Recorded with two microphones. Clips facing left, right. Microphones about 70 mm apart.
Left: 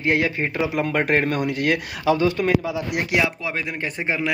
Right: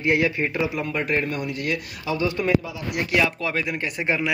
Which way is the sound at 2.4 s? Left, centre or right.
Centre.